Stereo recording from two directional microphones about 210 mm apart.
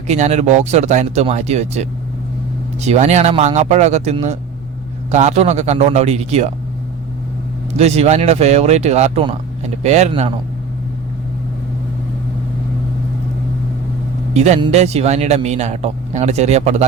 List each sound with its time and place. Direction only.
0.1 s speech: 30° right (ahead or behind)
7.8 s speech: 30° right (ahead or behind)
14.3 s speech: 30° right (ahead or behind)